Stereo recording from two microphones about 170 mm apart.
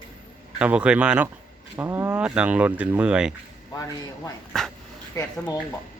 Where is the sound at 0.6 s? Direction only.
5° right (ahead or behind).